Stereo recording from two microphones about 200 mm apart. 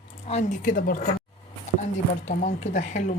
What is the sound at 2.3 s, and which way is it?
Speech, 40° left (ahead or behind).